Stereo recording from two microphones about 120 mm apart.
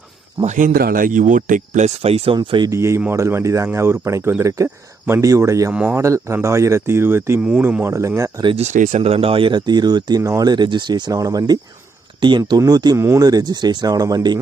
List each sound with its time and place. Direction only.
0.4 s speech: 90° right; by 2.6 s 40° right (ahead or behind)
2.6 s speech: 25° right (ahead or behind)
8.5 s speech: 80° right; by 14.3 s 35° right (ahead or behind)